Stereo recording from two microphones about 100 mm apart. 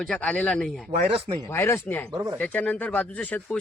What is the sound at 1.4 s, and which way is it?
Speech, 25° left (ahead or behind).